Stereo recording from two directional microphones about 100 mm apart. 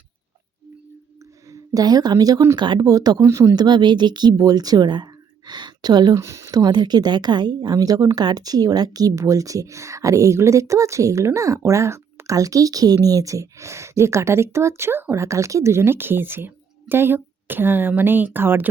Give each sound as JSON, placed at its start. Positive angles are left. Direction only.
{"t": 1.5, "sound": "a woman's voice", "side_deg": -35}
{"t": 2.6, "sound": "speech", "side_deg": -50}
{"t": 6.1, "sound": "a woman's voice", "side_deg": -30}